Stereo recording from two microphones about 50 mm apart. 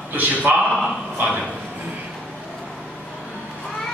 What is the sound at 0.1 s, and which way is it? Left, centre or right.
A man's voice, right.